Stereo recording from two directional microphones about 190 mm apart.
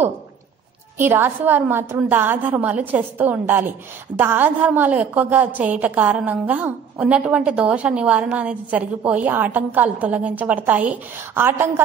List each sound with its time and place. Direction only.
0.9 s a woman's voice: 10° right (ahead or behind)